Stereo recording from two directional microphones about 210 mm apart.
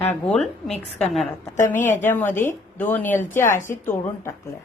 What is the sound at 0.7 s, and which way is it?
Speech, 30° left (ahead or behind).